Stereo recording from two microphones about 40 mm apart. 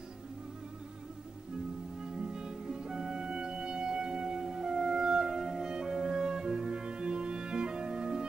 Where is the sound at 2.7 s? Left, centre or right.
Centre.